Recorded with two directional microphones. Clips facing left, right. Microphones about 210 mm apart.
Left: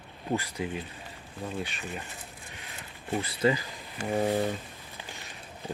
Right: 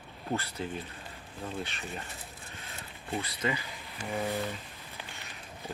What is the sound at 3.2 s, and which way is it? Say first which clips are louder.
Speech: left 10 dB; 30° left (ahead or behind).